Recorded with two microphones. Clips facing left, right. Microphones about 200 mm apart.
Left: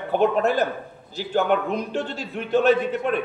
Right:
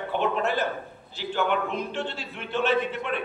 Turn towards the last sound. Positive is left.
turn(degrees=40)  # may be behind; listen again after turning